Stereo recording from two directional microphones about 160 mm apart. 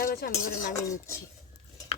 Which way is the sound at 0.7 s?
20° left (ahead or behind).